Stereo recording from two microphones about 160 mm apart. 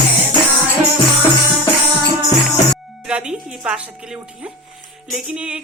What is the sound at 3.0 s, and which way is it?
A woman's voice, 5° right (ahead or behind).